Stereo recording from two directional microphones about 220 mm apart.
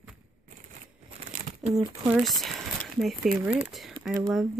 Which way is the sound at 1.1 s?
25° right (ahead or behind).